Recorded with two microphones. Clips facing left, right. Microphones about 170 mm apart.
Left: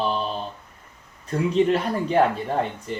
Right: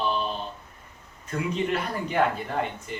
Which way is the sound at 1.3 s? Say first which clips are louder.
Left 7 dB; 30° left (ahead or behind).